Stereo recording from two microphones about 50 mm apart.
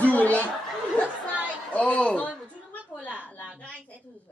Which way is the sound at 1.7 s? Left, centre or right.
Left.